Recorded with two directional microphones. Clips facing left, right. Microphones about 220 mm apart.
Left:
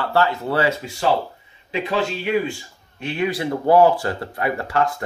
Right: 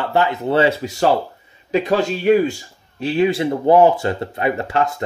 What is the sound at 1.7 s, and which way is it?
A man's voice, 40° right (ahead or behind).